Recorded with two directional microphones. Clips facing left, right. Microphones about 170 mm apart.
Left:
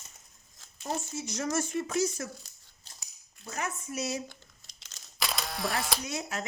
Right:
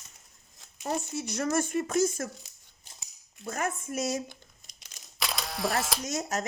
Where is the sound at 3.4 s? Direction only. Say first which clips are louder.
Right 4 dB; 50° right (ahead or behind).